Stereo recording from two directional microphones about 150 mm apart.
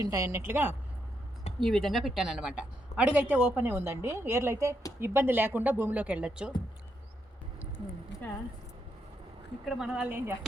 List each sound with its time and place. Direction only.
0.0 s a woman's voice: 20° right (ahead or behind)
1.5 s a woman's voice: centre (ahead or behind)
8.2 s speech: 10° left (ahead or behind)
9.6 s a woman's voice: 5° right (ahead or behind)